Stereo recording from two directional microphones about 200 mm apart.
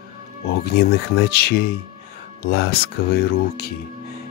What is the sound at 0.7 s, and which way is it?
Speech, 50° left (ahead or behind).